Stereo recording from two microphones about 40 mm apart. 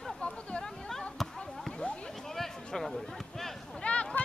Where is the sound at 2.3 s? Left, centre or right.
Centre.